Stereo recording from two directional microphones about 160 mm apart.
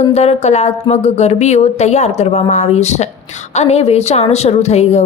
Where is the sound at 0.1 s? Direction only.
45° left (ahead or behind).